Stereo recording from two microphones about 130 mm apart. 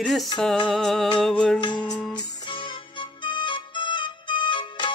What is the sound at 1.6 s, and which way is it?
Music, 35° left (ahead or behind).